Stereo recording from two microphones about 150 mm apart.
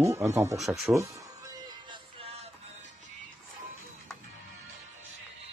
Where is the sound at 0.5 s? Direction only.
Centre (ahead or behind).